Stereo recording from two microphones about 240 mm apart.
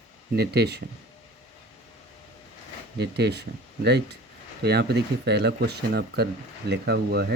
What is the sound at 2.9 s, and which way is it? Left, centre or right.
Speech, right.